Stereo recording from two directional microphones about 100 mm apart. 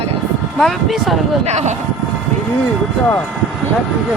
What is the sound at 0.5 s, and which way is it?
Speech, centre (ahead or behind).